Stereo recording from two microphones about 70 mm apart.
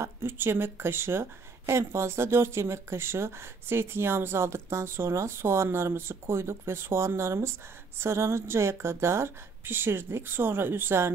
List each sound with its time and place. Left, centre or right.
0.0 s speech: right